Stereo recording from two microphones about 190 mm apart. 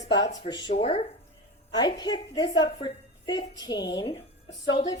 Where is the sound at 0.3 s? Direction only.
40° left (ahead or behind).